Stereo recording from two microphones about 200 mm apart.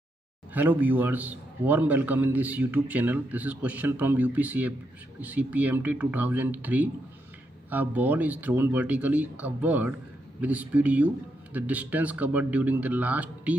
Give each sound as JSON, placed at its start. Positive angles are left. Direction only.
{"t": 0.5, "sound": "a man's voice", "side_deg": -10}